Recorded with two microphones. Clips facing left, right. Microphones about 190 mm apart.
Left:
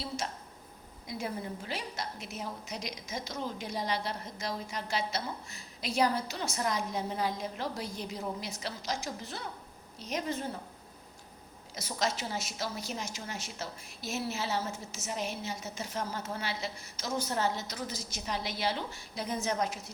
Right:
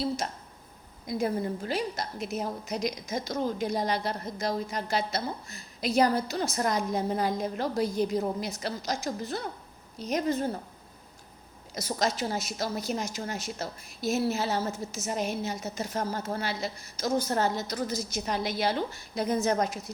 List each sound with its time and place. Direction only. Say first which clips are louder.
1.0 s a woman's voice: right 8 dB; 40° right (ahead or behind)
11.7 s a woman's voice: right 4 dB; 40° right (ahead or behind)